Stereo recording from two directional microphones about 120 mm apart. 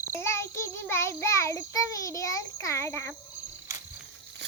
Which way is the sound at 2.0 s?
25° left (ahead or behind).